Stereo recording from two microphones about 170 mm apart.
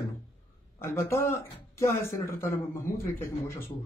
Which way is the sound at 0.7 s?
15° left (ahead or behind).